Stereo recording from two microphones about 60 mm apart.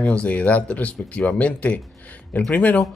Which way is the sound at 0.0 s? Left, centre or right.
Left.